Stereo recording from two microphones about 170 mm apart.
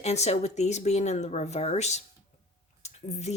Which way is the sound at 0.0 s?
40° left (ahead or behind).